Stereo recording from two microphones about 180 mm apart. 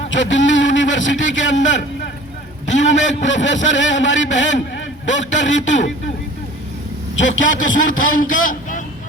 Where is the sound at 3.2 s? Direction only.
90° left.